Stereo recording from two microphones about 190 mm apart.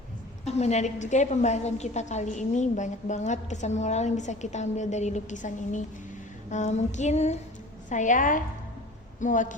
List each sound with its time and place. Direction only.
0.4 s a woman's voice: 35° left (ahead or behind)